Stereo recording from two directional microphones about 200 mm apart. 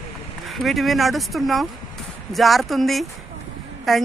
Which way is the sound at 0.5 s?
Centre (ahead or behind).